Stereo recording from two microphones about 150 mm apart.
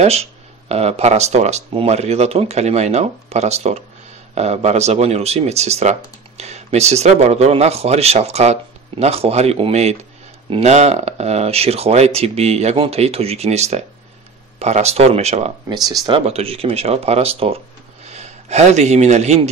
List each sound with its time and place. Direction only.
0.0 s speech: 45° right (ahead or behind)
15.7 s speech: 25° right (ahead or behind)
16.1 s a man's voice: 40° right (ahead or behind)